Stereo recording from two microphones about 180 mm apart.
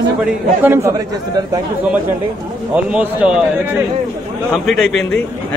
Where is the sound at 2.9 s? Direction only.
5° right (ahead or behind).